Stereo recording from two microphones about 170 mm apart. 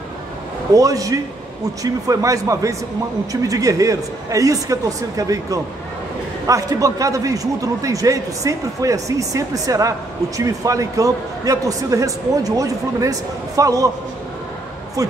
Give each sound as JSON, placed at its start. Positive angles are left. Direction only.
{"t": 0.7, "sound": "a man's voice", "side_deg": -20}
{"t": 15.0, "sound": "a man's voice", "side_deg": -20}